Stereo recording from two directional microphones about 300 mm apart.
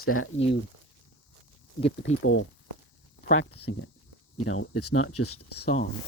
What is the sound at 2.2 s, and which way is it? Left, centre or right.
Speech, left.